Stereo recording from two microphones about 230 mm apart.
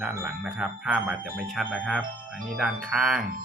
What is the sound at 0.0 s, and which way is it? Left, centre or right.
Speech, centre.